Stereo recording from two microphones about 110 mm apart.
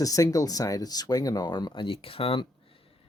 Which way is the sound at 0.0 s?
30° left (ahead or behind).